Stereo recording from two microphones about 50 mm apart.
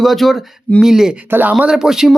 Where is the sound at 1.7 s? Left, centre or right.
Centre.